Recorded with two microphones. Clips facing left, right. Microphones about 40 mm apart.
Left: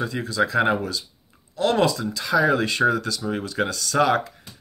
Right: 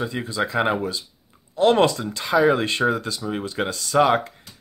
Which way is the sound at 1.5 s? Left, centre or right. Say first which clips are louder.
Right 3 dB; right.